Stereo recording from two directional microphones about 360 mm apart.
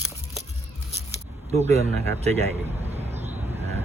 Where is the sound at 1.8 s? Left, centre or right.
Centre.